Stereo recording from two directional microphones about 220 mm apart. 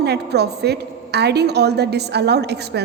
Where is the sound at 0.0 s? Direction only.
50° right (ahead or behind).